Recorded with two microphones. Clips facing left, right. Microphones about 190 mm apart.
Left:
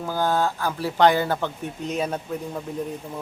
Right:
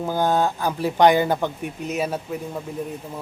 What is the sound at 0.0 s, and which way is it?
Speech, 20° right (ahead or behind).